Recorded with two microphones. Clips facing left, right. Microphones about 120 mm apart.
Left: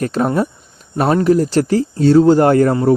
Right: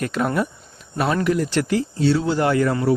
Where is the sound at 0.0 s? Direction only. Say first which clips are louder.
Left 5 dB; 35° left (ahead or behind).